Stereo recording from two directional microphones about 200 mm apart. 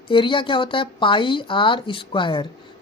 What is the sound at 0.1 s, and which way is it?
Speech, 25° left (ahead or behind).